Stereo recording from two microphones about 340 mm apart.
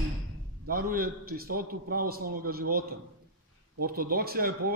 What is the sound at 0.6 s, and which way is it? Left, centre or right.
A man's voice, right.